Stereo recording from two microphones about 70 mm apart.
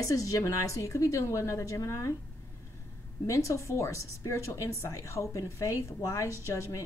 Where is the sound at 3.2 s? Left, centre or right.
Left.